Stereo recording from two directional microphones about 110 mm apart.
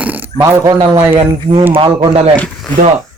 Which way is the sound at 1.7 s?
55° right (ahead or behind).